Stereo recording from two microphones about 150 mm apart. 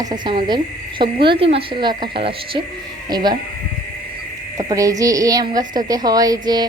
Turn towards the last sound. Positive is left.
turn(degrees=-25)  # may be behind; listen again after turning